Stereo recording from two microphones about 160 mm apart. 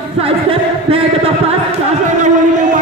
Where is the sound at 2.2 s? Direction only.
50° right (ahead or behind).